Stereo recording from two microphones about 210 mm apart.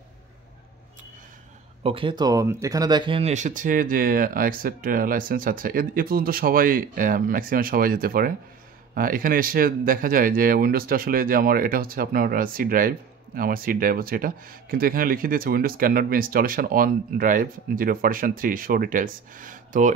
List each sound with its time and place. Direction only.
1.8 s speech: 25° right (ahead or behind)